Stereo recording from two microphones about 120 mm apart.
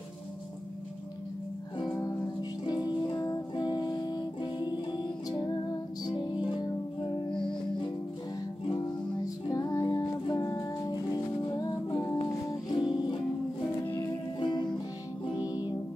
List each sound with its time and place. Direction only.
2.6 s music: 35° left (ahead or behind)
6.0 s music: 40° left (ahead or behind)
9.5 s music: 30° left (ahead or behind)
13.8 s music: 20° left (ahead or behind)
14.4 s music: 35° left (ahead or behind)